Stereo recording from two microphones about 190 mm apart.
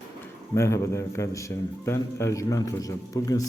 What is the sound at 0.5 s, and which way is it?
A man's voice, 15° left (ahead or behind).